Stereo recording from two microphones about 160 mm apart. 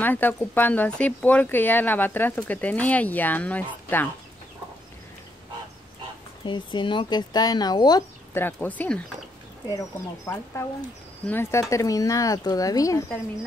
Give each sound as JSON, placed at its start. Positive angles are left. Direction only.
{"t": 0.0, "sound": "speech", "side_deg": 10}
{"t": 6.4, "sound": "speech", "side_deg": 30}
{"t": 8.3, "sound": "speech", "side_deg": 15}
{"t": 9.7, "sound": "speech", "side_deg": 20}